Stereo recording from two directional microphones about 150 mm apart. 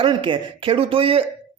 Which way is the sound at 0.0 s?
35° right (ahead or behind).